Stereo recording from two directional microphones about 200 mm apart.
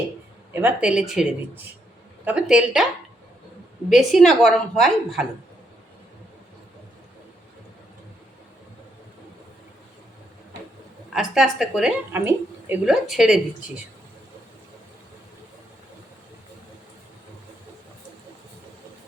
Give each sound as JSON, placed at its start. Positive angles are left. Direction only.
{"t": 0.5, "sound": "a woman's voice", "side_deg": -10}
{"t": 3.8, "sound": "a woman's voice", "side_deg": 0}
{"t": 11.1, "sound": "a woman's voice", "side_deg": 0}